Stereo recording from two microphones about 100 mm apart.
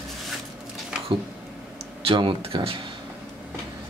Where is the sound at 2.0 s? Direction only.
60° right (ahead or behind).